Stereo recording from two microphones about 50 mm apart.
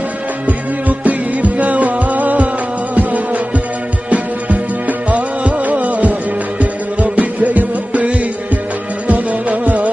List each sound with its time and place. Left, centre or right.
0.5 s music: right